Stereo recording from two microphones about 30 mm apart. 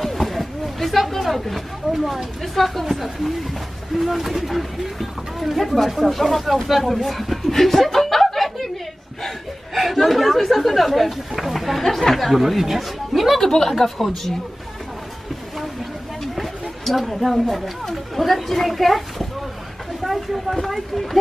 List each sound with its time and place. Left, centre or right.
0.0 s a sound: centre
2.4 s a woman's voice: centre
7.5 s chuckle: centre
9.8 s speech: centre
11.8 s speech: centre
13.5 s a woman's voice: centre
16.3 s a sound: centre
17.9 s a woman's voice: centre